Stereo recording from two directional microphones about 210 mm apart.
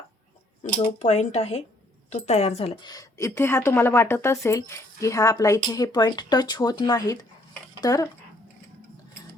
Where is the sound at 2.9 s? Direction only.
15° left (ahead or behind).